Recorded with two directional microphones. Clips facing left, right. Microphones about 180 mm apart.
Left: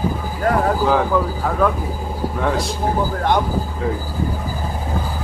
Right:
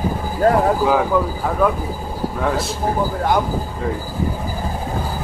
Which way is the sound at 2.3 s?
Centre (ahead or behind).